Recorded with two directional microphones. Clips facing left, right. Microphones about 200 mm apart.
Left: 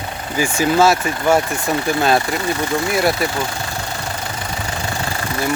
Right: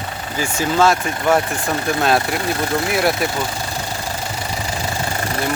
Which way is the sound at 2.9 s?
Centre (ahead or behind).